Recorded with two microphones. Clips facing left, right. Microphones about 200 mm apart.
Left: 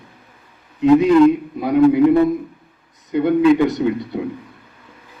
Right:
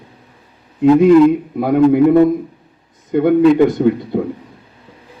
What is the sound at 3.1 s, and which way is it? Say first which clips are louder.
Speech: right 3 dB; 50° right (ahead or behind).